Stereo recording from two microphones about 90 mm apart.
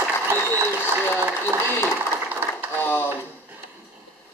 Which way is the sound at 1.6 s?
30° left (ahead or behind).